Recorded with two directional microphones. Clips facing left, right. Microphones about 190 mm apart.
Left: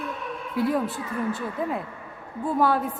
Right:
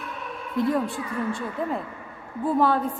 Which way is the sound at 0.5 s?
5° left (ahead or behind).